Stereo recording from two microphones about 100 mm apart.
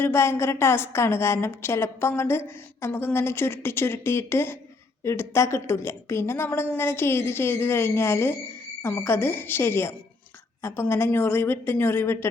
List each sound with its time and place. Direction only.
0.0 s a woman's voice: 25° left (ahead or behind)